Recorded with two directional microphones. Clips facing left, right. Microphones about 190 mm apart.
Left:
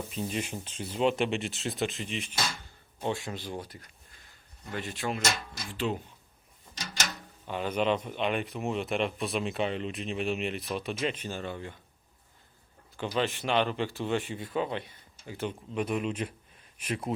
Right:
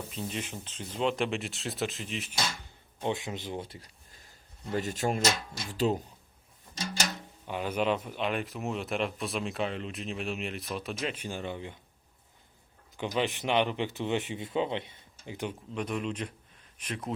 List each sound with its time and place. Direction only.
0.2 s speech: 10° left (ahead or behind)
3.0 s speech: 20° right (ahead or behind)
4.7 s speech: 40° right (ahead or behind)
7.4 s speech: 10° right (ahead or behind)
13.1 s speech: 20° right (ahead or behind)
15.7 s speech: 5° left (ahead or behind)